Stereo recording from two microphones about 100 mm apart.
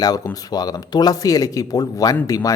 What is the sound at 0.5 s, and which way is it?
Speech, 40° left (ahead or behind).